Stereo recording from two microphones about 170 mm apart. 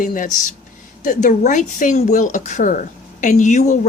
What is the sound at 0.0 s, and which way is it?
Speech, 50° left (ahead or behind).